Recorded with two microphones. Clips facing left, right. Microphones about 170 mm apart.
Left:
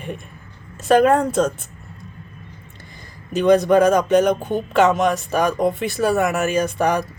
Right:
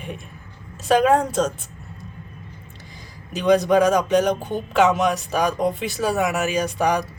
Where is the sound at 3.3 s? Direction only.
55° left (ahead or behind).